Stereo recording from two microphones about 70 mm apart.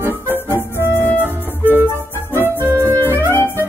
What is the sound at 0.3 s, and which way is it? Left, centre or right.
Music, left.